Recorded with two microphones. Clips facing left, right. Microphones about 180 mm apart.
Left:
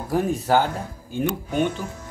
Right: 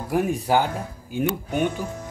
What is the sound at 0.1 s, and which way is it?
Speech, 10° right (ahead or behind).